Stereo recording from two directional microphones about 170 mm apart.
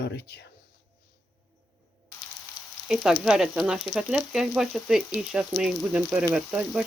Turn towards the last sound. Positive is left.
turn(degrees=-5)  # may be behind; listen again after turning